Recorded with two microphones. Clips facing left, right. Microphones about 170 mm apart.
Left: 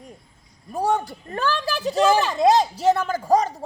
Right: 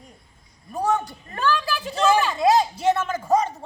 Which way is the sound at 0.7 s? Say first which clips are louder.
Left 1 dB; 35° left (ahead or behind).